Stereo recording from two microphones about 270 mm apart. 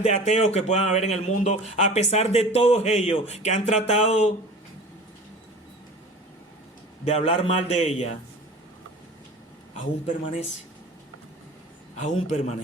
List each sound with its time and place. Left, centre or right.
0.0 s speech: left
7.0 s speech: left
11.9 s speech: left